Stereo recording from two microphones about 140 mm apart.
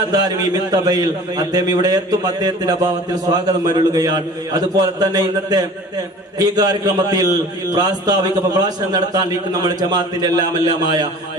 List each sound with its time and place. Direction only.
0.1 s a man's voice: 25° right (ahead or behind)